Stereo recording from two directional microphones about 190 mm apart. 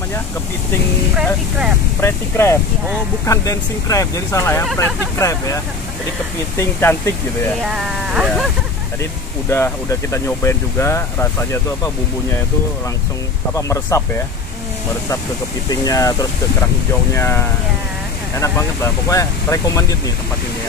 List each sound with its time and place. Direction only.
2.0 s speech: 15° left (ahead or behind)
6.6 s speech: 15° left (ahead or behind)
7.6 s speech: 5° right (ahead or behind)
9.5 s speech: 15° left (ahead or behind)
13.6 s speech: 15° left (ahead or behind)
15.7 s speech: 20° left (ahead or behind)